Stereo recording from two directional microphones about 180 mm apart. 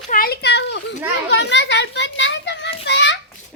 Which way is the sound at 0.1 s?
55° left (ahead or behind).